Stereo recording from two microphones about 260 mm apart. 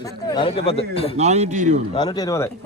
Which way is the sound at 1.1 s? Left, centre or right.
Right.